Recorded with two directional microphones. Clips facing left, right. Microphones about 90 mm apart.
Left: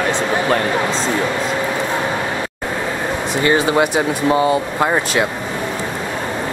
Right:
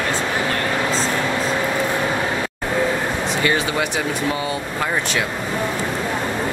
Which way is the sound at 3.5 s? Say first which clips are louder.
Left 9 dB; 40° left (ahead or behind).